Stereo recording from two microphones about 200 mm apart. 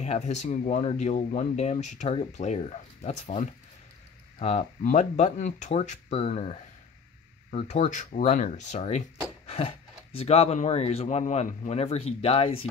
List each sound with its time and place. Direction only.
0.0 s speech: 35° left (ahead or behind)